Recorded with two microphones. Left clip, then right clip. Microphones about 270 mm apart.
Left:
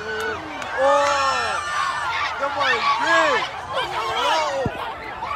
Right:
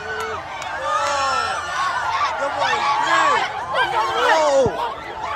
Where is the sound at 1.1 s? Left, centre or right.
Centre.